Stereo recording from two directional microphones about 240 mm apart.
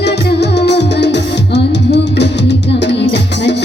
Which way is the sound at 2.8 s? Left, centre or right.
Left.